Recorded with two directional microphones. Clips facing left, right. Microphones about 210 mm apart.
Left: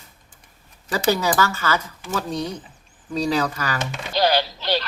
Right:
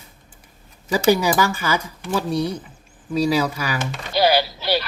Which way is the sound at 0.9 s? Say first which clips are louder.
Right 4 dB; 15° right (ahead or behind).